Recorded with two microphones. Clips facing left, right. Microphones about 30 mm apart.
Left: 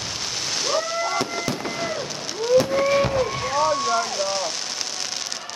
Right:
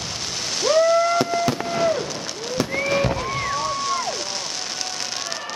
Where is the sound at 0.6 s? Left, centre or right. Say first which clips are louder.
Right 8 dB; centre.